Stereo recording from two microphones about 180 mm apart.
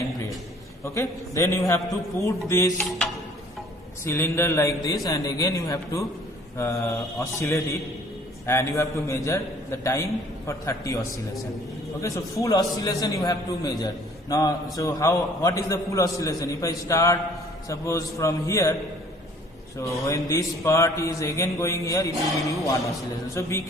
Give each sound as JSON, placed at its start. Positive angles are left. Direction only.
{"t": 0.8, "sound": "a man's voice", "side_deg": 15}
{"t": 4.0, "sound": "a man's voice", "side_deg": 15}
{"t": 20.1, "sound": "a man's voice", "side_deg": 15}
{"t": 23.2, "sound": "a man's voice", "side_deg": 15}